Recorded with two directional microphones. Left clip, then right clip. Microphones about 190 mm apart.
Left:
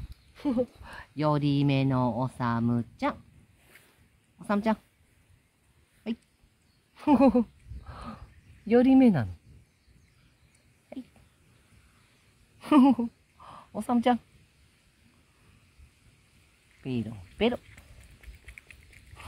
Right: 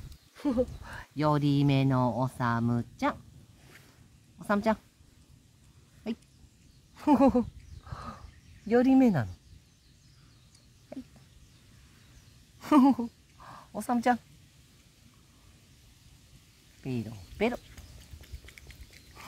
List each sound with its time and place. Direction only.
0.3 s speech: 15° left (ahead or behind)
4.4 s a woman's voice: 15° left (ahead or behind)
6.0 s dog: 15° left (ahead or behind)
7.0 s a sound: 15° left (ahead or behind)
8.6 s speech: 20° left (ahead or behind)
12.5 s a sound: 15° left (ahead or behind)
16.8 s speech: 20° left (ahead or behind)